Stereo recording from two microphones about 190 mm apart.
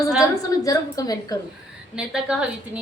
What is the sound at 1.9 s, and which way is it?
Speech, 5° right (ahead or behind).